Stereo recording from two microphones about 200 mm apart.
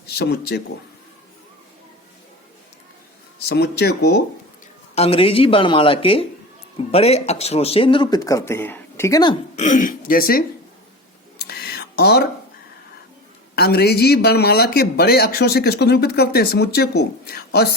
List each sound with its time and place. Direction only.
0.2 s speech: 55° left (ahead or behind)
3.5 s a man's voice: 55° left (ahead or behind)
4.9 s speech: 30° left (ahead or behind)
9.6 s a man's voice: 40° left (ahead or behind)
11.4 s a sound: 50° left (ahead or behind)
13.6 s a man's voice: 50° left (ahead or behind)